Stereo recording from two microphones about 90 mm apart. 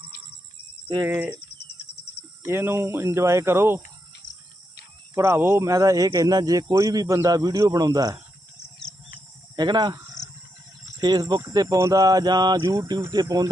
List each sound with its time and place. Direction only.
1.0 s speech: 25° right (ahead or behind)
2.4 s speech: 30° right (ahead or behind)
5.1 s speech: 30° right (ahead or behind); by 8.2 s 45° right (ahead or behind)
9.6 s speech: 50° right (ahead or behind)
11.0 s speech: 50° right (ahead or behind)